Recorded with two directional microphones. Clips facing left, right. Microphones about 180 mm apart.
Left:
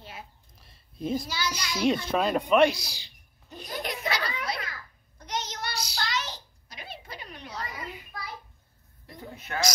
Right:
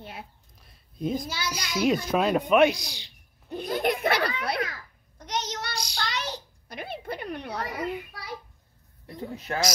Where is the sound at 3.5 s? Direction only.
55° right (ahead or behind).